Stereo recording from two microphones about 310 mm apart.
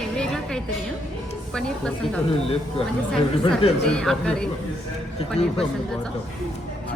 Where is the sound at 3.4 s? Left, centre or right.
Centre.